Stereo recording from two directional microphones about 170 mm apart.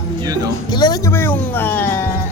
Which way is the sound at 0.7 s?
25° left (ahead or behind).